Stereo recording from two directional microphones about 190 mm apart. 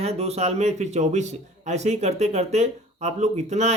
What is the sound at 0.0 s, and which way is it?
A man's voice, 35° right (ahead or behind).